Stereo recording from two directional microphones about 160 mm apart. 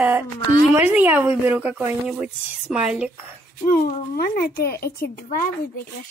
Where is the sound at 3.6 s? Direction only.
60° left (ahead or behind).